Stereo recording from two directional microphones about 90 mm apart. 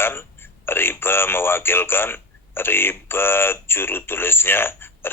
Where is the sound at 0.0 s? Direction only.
25° left (ahead or behind).